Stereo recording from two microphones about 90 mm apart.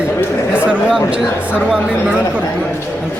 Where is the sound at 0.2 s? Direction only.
20° left (ahead or behind).